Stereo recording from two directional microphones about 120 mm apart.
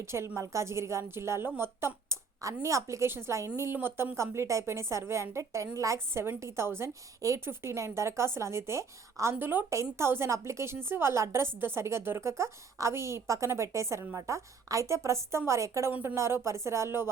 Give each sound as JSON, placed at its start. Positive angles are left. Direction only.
{"t": 0.0, "sound": "a woman's voice", "side_deg": -20}